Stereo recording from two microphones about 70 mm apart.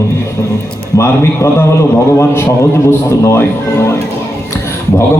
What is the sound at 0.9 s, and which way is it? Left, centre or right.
Speech, left.